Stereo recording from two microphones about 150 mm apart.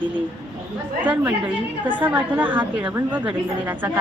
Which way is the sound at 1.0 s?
10° right (ahead or behind).